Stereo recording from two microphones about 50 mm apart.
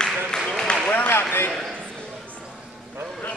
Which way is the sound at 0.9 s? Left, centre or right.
Left.